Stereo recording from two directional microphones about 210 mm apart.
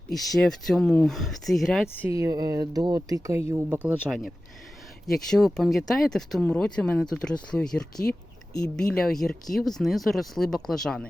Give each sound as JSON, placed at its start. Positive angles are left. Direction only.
{"t": 0.1, "sound": "speech", "side_deg": 0}
{"t": 2.0, "sound": "speech", "side_deg": -15}
{"t": 5.0, "sound": "speech", "side_deg": 0}